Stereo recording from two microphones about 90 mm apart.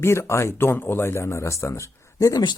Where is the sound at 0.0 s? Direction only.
30° left (ahead or behind).